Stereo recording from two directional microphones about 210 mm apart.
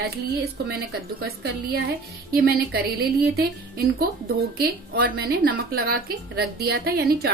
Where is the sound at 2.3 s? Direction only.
45° right (ahead or behind).